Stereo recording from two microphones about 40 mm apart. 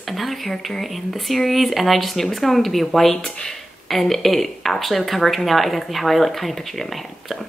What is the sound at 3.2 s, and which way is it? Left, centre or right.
Speech, centre.